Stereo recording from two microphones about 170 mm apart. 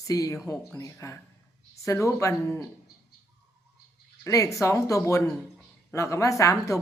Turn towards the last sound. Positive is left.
turn(degrees=20)  # may be behind; listen again after turning